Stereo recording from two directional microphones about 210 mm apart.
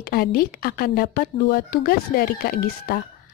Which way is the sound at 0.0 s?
45° left (ahead or behind).